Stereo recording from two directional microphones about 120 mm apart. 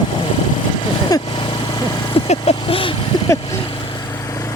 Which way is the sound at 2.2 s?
55° left (ahead or behind).